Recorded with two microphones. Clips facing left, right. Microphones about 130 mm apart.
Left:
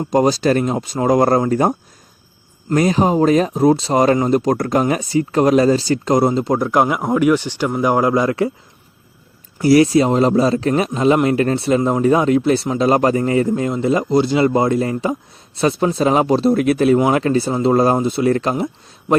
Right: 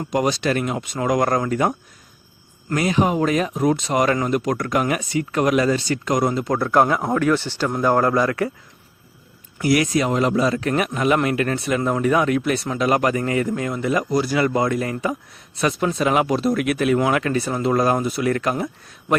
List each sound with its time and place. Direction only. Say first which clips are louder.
0.1 s speech: left 6 dB; 35° left (ahead or behind)
2.7 s speech: left 5 dB; 35° left (ahead or behind)
6.6 s speech: left 1 dB; 15° left (ahead or behind)
9.6 s speech: left 7 dB; 30° left (ahead or behind)